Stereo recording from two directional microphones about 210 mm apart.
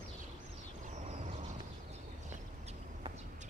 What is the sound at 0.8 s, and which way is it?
Vehicle, 35° right (ahead or behind).